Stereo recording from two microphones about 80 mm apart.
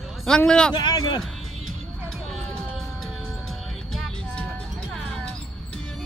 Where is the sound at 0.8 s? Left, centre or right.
Left.